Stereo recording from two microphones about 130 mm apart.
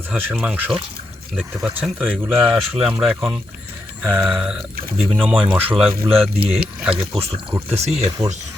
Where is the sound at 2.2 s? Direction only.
15° right (ahead or behind).